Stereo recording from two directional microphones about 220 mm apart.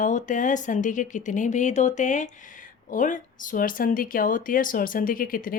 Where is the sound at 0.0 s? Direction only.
35° left (ahead or behind).